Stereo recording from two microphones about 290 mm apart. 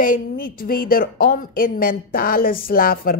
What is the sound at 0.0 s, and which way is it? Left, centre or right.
A woman's voice, left.